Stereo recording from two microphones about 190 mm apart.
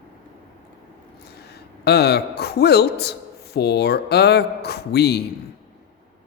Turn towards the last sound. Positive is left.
turn(degrees=60)  # may be behind; listen again after turning